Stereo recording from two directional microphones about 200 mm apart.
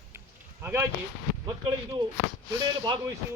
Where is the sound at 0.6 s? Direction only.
10° right (ahead or behind).